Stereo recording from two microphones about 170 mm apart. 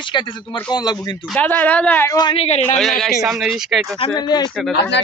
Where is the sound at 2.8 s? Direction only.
Centre (ahead or behind).